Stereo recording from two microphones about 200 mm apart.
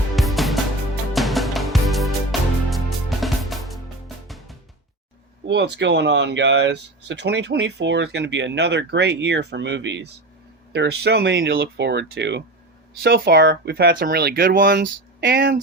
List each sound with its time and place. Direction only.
0.2 s music: centre (ahead or behind)
5.5 s speech: 60° right (ahead or behind)